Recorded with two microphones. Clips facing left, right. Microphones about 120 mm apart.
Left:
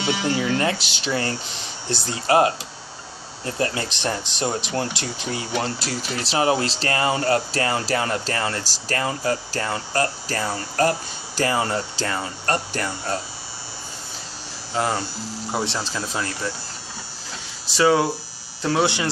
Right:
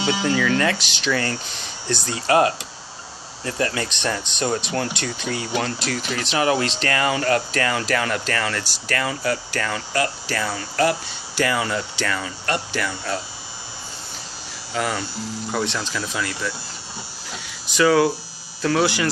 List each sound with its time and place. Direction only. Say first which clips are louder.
0.3 s speech: right 2 dB; 30° left (ahead or behind)
14.7 s speech: left 1 dB; 30° left (ahead or behind)
17.7 s speech: right 1 dB; 25° left (ahead or behind)